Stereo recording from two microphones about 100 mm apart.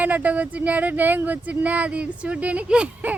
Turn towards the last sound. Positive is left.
turn(degrees=-10)  # may be behind; listen again after turning